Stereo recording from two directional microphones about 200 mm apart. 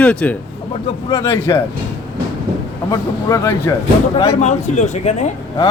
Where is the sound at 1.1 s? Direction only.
15° left (ahead or behind).